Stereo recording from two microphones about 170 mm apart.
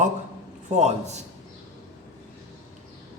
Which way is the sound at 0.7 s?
40° right (ahead or behind).